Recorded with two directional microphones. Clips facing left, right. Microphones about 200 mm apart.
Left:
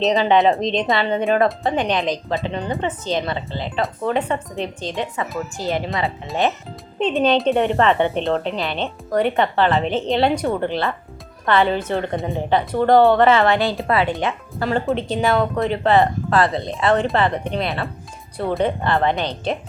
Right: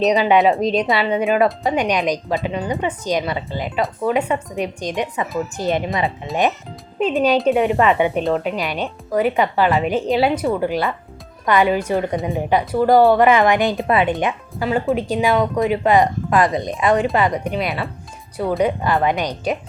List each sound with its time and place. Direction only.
0.1 s a woman's voice: 15° right (ahead or behind)
7.0 s a woman's voice: 5° right (ahead or behind)
14.6 s a woman's voice: 5° right (ahead or behind)